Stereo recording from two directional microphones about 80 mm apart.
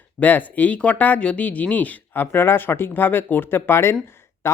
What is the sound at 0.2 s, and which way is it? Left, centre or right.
Speech, left.